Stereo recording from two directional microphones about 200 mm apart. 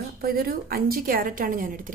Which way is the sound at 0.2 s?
45° right (ahead or behind).